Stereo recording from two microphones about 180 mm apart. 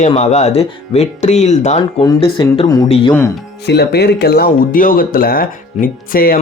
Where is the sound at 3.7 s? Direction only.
65° left (ahead or behind).